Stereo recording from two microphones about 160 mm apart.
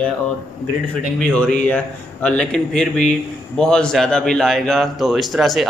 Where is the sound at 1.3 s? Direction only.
10° left (ahead or behind).